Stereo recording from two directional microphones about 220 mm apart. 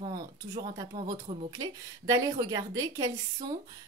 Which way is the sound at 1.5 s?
15° right (ahead or behind).